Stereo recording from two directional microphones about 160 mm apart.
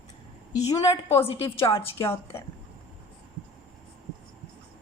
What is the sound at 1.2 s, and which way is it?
Speech, 35° left (ahead or behind).